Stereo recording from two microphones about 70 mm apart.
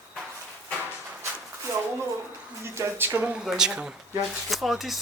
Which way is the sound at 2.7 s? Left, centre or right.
Right.